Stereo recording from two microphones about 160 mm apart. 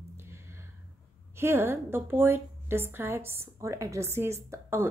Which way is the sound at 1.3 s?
15° right (ahead or behind).